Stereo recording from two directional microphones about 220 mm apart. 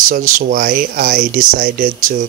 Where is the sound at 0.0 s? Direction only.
35° right (ahead or behind).